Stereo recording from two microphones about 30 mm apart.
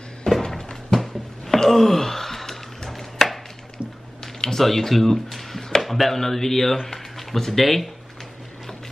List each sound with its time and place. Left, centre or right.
0.3 s a sound: left
1.5 s gasp: centre
2.9 s chopping: centre
4.6 s speech: centre
5.8 s speech: centre